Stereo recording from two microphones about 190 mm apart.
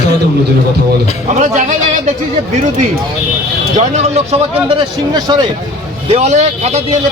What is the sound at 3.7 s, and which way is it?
A man's voice, 35° right (ahead or behind).